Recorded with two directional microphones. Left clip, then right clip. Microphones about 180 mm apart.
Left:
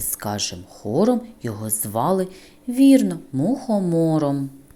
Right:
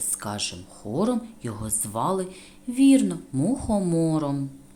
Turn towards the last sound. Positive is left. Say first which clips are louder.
# left 5 dB
turn(degrees=20)  # may be behind; listen again after turning